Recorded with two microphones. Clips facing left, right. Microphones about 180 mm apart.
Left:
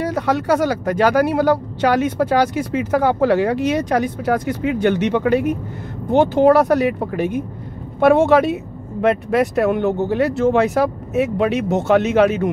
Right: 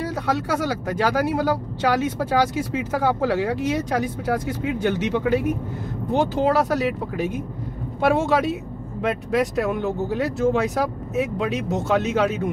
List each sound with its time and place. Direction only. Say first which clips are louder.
0.0 s speech: left 5 dB; 65° left (ahead or behind)